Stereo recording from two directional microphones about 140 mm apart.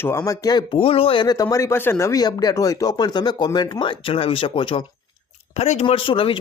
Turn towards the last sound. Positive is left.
turn(degrees=40)  # may be behind; listen again after turning